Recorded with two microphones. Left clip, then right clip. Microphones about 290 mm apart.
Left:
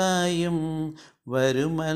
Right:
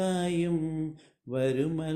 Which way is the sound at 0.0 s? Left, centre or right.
Centre.